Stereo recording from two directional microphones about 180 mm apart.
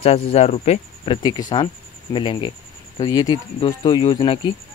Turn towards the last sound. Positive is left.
turn(degrees=25)  # may be behind; listen again after turning